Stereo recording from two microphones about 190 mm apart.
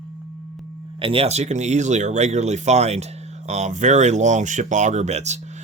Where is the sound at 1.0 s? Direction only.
30° right (ahead or behind).